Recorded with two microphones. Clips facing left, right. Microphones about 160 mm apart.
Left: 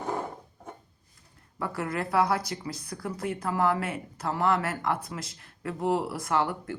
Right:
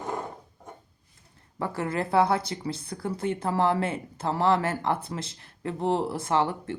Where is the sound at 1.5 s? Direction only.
30° right (ahead or behind).